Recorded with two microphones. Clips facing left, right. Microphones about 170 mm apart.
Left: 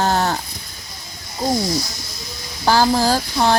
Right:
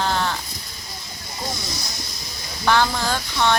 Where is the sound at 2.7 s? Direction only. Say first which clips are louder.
Left 5 dB; 35° left (ahead or behind).